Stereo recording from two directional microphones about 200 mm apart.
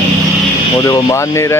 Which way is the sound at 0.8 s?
15° left (ahead or behind).